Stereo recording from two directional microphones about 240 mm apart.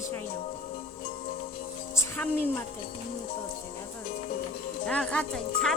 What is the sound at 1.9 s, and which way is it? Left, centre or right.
Music, centre.